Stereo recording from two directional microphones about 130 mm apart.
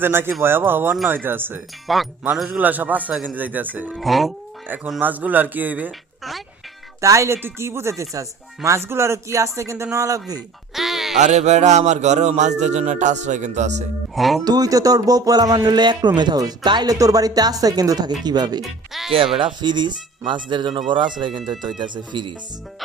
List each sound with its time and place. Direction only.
0.0 s speech: 15° right (ahead or behind)
1.9 s speech: centre (ahead or behind)
3.9 s speech: centre (ahead or behind)
4.9 s speech: 15° right (ahead or behind)
7.0 s speech: 25° right (ahead or behind)
10.8 s a sound: centre (ahead or behind)
11.2 s music: 60° right (ahead or behind)
14.2 s speech: centre (ahead or behind)
14.4 s speech: 30° right (ahead or behind)
18.6 s speech: centre (ahead or behind)
19.1 s speech: 45° right (ahead or behind)